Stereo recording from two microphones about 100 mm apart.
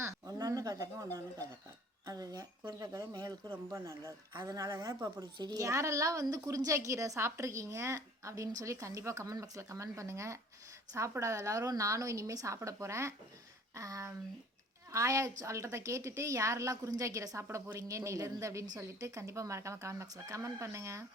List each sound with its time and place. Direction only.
0.0 s a sound: 35° right (ahead or behind)
2.0 s a woman's voice: 40° right (ahead or behind)
3.5 s a woman's voice: 30° right (ahead or behind)